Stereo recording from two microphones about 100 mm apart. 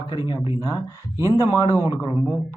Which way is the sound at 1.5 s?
35° left (ahead or behind).